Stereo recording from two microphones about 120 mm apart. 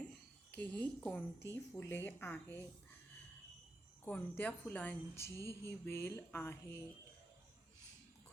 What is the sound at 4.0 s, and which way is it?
A woman's voice, 15° left (ahead or behind).